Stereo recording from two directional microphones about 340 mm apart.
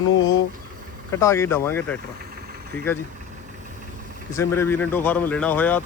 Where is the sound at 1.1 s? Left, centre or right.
Centre.